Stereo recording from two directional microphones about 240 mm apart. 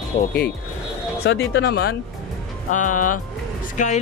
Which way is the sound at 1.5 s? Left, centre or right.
Left.